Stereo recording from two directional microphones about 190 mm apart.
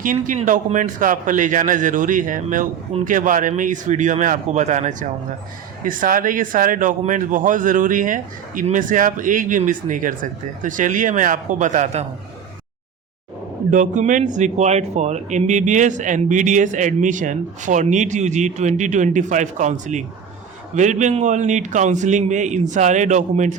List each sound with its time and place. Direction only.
0.0 s a man's voice: 45° right (ahead or behind)
13.7 s speech: 40° right (ahead or behind)